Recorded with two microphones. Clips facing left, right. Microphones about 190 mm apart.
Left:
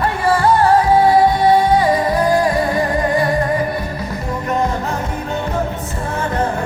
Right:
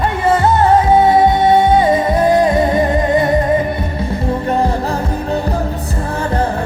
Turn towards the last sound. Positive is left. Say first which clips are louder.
# right 3 dB
turn(degrees=-30)  # may be behind; listen again after turning